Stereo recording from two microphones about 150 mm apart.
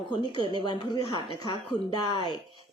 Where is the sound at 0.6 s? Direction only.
30° left (ahead or behind).